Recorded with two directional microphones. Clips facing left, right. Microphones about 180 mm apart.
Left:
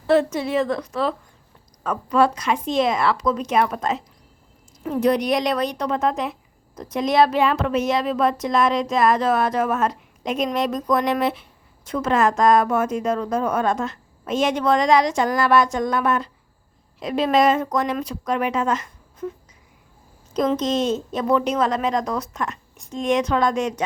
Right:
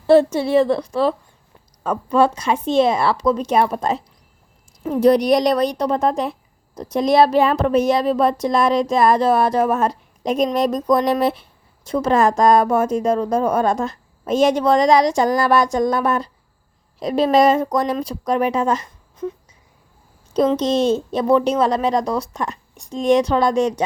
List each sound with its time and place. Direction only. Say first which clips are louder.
0.1 s a woman's voice: right 5 dB; 30° right (ahead or behind)
20.6 s speech: right 4 dB; 30° right (ahead or behind)